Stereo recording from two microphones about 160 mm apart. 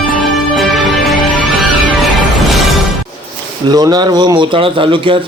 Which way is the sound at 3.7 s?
25° right (ahead or behind).